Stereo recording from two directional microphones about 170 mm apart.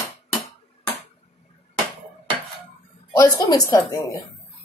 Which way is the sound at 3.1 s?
20° left (ahead or behind).